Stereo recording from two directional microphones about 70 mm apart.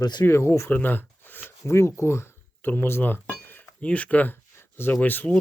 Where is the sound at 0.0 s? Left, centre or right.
Left.